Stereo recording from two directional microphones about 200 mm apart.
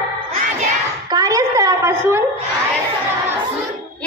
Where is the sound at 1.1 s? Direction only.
15° right (ahead or behind).